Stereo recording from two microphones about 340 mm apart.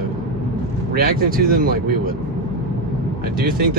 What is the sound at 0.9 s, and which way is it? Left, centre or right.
Speech, right.